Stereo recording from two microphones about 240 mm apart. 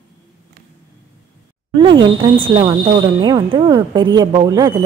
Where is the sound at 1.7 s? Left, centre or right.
Centre.